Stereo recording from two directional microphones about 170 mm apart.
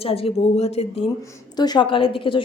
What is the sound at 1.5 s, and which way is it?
Speech, 25° left (ahead or behind).